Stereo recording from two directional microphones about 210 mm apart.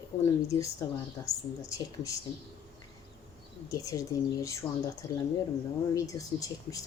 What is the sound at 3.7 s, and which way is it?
Speech, 15° left (ahead or behind).